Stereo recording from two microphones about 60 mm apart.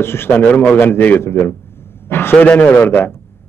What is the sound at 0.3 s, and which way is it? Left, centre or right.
Speech, left.